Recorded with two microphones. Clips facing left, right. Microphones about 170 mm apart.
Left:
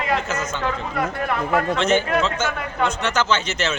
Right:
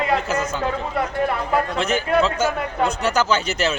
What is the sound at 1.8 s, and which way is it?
A man's voice, 35° right (ahead or behind).